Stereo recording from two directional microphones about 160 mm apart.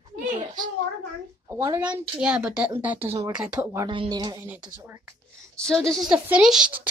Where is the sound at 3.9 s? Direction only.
30° right (ahead or behind).